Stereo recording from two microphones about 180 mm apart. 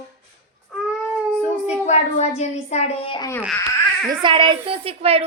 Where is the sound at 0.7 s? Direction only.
Centre (ahead or behind).